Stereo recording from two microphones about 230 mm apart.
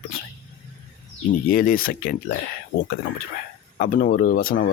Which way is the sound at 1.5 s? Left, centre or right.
Left.